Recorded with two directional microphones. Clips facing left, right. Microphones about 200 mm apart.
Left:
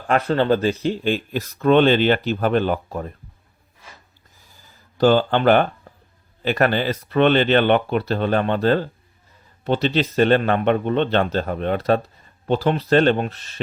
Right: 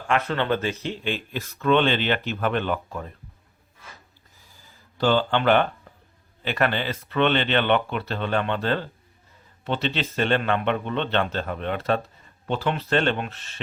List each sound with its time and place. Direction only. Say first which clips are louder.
0.1 s speech: left 6 dB; 35° left (ahead or behind)
4.9 s speech: left 5 dB; 40° left (ahead or behind)